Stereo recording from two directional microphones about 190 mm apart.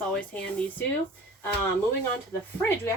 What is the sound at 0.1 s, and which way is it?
Speech, 5° left (ahead or behind).